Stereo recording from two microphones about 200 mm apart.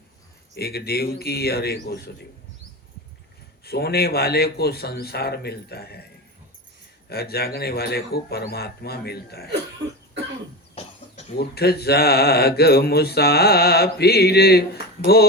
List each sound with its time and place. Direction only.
0.5 s speech: 50° left (ahead or behind)
3.6 s speech: 50° left (ahead or behind)
7.1 s speech: 50° left (ahead or behind)
10.8 s cough: 30° left (ahead or behind)
11.3 s speech: 50° left (ahead or behind)